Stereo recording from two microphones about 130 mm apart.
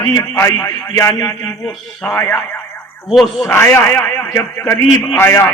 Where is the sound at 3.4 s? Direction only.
15° left (ahead or behind).